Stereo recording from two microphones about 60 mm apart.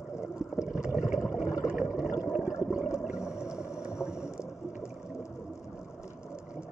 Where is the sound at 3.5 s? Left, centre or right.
Left.